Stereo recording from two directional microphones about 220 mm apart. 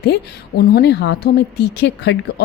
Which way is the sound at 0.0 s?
45° left (ahead or behind).